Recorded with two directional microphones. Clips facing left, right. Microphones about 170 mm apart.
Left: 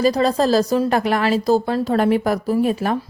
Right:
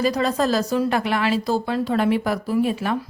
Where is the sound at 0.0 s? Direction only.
35° left (ahead or behind).